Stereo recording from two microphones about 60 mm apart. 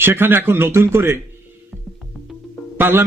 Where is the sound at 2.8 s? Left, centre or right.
Right.